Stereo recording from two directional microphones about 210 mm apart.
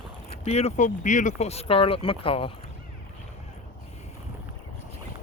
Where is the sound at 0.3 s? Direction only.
30° left (ahead or behind).